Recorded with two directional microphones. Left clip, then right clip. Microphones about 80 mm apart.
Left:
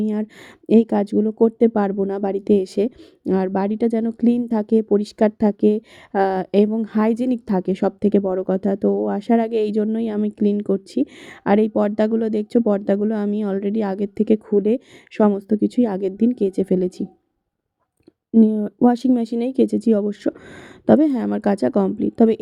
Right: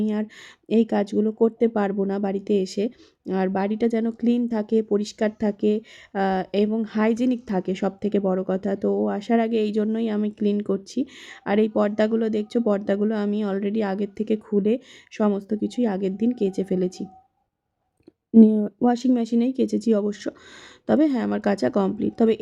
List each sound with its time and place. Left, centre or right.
0.0 s speech: left
18.3 s speech: centre
18.9 s speech: left